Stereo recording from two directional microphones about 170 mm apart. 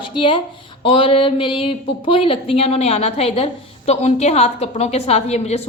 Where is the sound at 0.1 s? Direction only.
30° left (ahead or behind).